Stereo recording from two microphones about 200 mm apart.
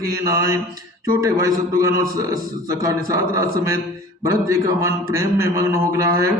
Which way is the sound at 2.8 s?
15° right (ahead or behind).